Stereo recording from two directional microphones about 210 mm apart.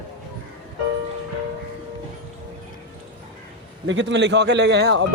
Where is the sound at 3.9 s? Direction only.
60° right (ahead or behind).